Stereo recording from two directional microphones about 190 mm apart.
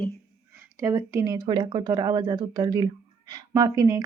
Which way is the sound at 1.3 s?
25° right (ahead or behind).